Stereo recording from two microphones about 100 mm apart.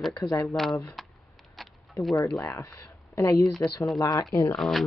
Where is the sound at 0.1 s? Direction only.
40° left (ahead or behind).